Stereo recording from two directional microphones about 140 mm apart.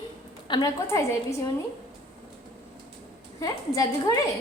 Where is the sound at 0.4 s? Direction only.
35° left (ahead or behind).